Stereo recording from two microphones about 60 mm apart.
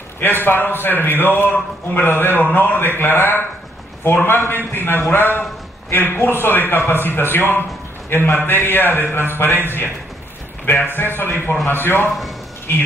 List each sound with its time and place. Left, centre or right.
0.2 s a man's voice: left
10.6 s a man's voice: left